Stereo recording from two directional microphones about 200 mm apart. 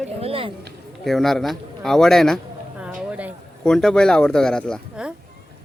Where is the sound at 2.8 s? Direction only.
5° right (ahead or behind).